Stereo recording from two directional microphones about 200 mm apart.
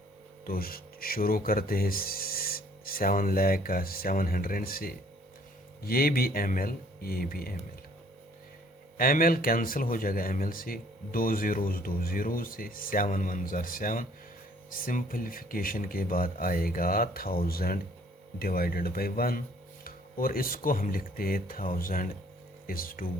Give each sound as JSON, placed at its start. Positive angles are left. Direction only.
{"t": 0.4, "sound": "speech", "side_deg": 45}
{"t": 9.0, "sound": "speech", "side_deg": 45}